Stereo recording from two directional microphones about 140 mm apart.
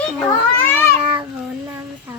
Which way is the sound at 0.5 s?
15° left (ahead or behind).